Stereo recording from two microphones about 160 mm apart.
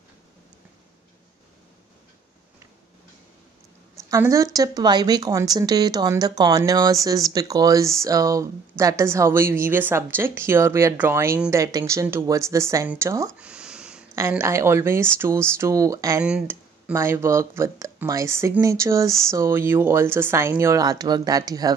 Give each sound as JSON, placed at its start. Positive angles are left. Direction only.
{"t": 4.1, "sound": "speech", "side_deg": -20}
{"t": 13.4, "sound": "a sound", "side_deg": -5}
{"t": 14.1, "sound": "speech", "side_deg": -15}
{"t": 16.2, "sound": "speech", "side_deg": -5}